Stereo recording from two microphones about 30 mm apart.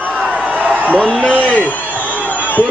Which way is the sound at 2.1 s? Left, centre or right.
Left.